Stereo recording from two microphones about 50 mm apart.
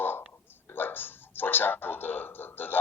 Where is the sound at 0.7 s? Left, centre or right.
Left.